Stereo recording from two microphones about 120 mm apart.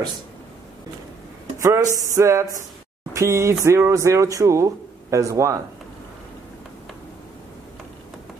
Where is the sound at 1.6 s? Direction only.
25° right (ahead or behind).